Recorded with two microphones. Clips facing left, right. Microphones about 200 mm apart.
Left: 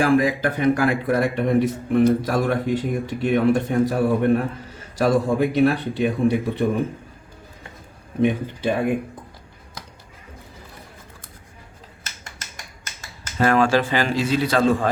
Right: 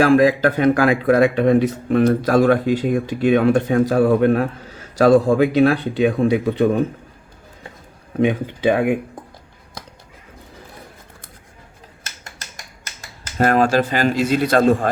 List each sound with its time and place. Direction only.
0.0 s speech: 90° right
8.2 s speech: 80° right
13.3 s speech: 45° right (ahead or behind)